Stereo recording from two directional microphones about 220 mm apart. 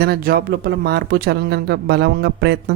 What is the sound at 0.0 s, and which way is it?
Speech, 45° right (ahead or behind).